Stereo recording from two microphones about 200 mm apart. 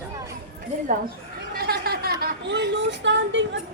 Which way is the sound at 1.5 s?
50° right (ahead or behind).